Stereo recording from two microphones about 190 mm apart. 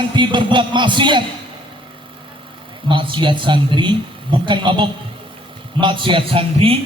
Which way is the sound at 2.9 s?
25° right (ahead or behind).